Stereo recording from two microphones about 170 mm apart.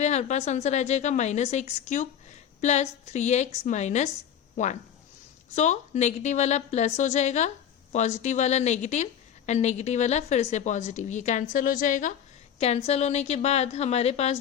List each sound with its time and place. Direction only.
0.0 s a woman's voice: 45° left (ahead or behind)
12.5 s a woman's voice: 40° left (ahead or behind)